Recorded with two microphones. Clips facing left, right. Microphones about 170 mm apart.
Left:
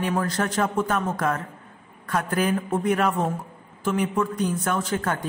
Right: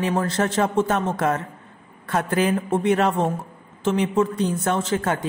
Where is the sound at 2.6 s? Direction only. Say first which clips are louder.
Right 3 dB; 25° right (ahead or behind).